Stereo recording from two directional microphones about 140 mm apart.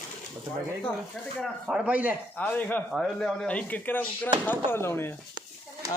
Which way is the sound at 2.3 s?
10° left (ahead or behind).